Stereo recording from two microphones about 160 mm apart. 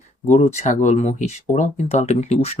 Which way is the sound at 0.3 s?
45° left (ahead or behind).